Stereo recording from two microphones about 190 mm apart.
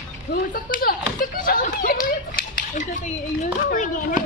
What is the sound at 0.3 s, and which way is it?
Speech, 50° left (ahead or behind).